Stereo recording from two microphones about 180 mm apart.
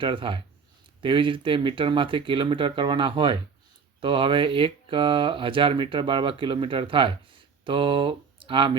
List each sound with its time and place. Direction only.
0.0 s speech: 30° right (ahead or behind)